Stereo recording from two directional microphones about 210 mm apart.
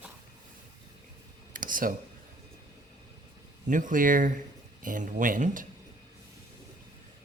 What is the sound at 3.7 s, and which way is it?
Speech, 40° right (ahead or behind).